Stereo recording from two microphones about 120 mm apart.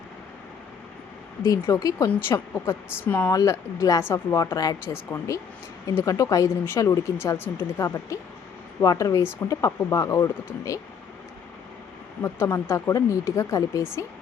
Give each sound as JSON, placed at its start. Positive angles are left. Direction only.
{"t": 1.4, "sound": "speech", "side_deg": 25}
{"t": 4.5, "sound": "speech", "side_deg": 30}
{"t": 12.2, "sound": "speech", "side_deg": 20}